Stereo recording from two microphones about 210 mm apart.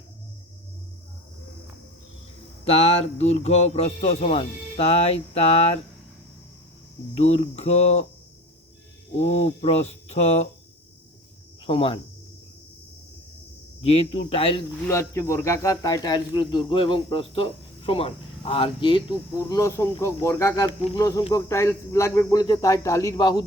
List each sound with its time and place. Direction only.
2.6 s speech: 30° left (ahead or behind)
7.1 s speech: 30° left (ahead or behind)
9.1 s speech: 30° left (ahead or behind)
11.6 s speech: 25° left (ahead or behind)
13.8 s speech: 30° left (ahead or behind)
14.8 s speech: 15° left (ahead or behind)